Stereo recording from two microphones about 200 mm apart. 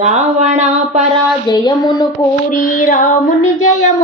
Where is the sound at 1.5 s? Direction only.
20° left (ahead or behind).